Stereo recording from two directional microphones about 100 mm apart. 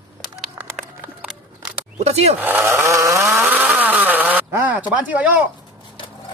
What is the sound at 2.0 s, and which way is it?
Speech, 90° right.